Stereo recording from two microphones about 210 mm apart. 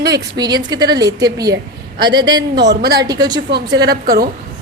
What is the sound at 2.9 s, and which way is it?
Speech, 20° right (ahead or behind).